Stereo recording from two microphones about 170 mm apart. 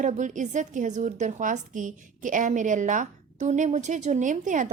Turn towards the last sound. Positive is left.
turn(degrees=-50)  # may be behind; listen again after turning